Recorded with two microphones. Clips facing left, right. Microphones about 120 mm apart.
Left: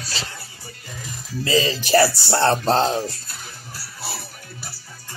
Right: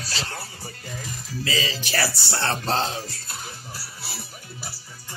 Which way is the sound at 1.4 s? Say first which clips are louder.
Left 8 dB; 40° left (ahead or behind).